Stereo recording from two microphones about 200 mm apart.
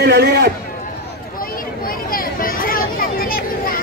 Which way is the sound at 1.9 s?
45° left (ahead or behind).